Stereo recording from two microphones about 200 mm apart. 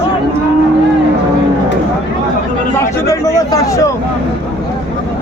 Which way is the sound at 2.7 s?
15° left (ahead or behind).